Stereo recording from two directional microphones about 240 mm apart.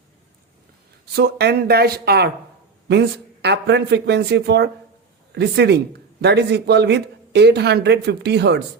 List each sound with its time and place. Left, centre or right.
1.1 s a man's voice: right